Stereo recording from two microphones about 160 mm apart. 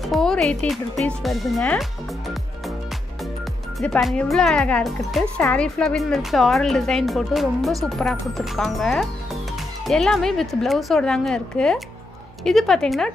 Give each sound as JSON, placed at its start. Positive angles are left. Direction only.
{"t": 0.0, "sound": "speech", "side_deg": 0}
{"t": 3.8, "sound": "speech", "side_deg": 5}